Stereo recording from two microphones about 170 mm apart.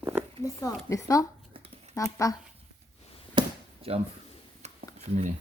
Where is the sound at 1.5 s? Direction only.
35° right (ahead or behind).